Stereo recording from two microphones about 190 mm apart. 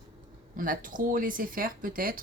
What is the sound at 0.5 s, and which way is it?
Speech, 45° right (ahead or behind).